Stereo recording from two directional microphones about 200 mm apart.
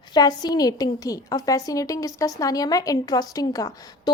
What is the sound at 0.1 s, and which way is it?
A woman's voice, 20° left (ahead or behind).